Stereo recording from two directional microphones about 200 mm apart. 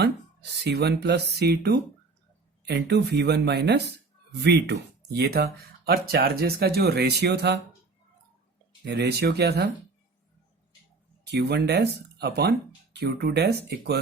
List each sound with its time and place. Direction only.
0.6 s speech: 55° right (ahead or behind)
8.8 s speech: 55° right (ahead or behind)
11.3 s speech: 55° right (ahead or behind)